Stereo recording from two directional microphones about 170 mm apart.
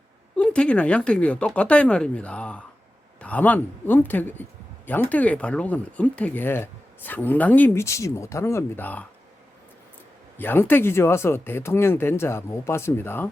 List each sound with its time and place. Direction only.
0.3 s speech: 5° left (ahead or behind)
10.3 s speech: 10° left (ahead or behind)